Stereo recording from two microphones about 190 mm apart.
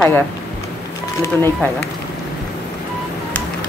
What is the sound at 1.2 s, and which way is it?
Speech, 10° left (ahead or behind).